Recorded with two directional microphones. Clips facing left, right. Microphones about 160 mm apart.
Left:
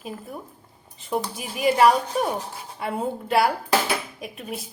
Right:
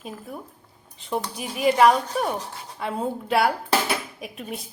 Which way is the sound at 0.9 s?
Centre (ahead or behind).